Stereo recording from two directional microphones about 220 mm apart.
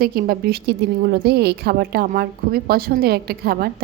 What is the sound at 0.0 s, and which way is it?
A woman's voice, 45° right (ahead or behind).